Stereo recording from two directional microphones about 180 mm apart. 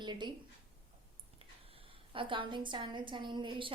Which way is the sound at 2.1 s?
30° right (ahead or behind).